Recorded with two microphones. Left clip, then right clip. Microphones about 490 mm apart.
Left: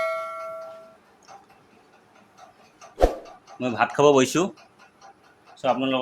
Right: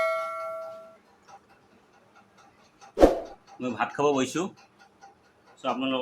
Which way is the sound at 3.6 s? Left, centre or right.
Right.